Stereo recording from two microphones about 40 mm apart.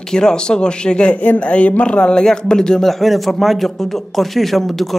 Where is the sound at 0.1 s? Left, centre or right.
Centre.